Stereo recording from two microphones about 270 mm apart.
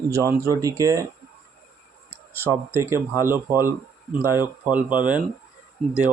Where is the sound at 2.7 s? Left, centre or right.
Centre.